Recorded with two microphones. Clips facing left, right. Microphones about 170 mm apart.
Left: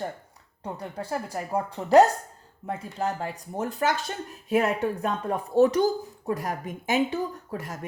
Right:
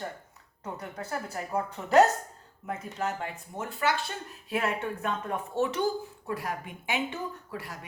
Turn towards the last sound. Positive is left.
turn(degrees=45)  # may be behind; listen again after turning